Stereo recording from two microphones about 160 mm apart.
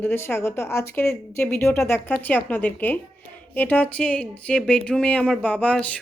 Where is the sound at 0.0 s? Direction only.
15° left (ahead or behind).